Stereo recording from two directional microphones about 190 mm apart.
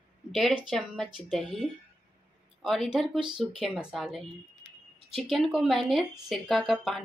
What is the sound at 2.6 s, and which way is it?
Speech, centre (ahead or behind).